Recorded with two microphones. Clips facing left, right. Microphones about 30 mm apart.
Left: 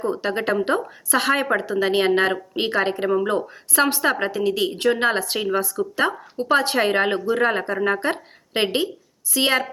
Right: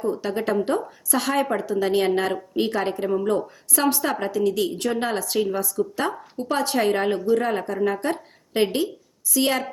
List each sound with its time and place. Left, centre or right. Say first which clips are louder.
0.0 s a woman's voice: left 1 dB; left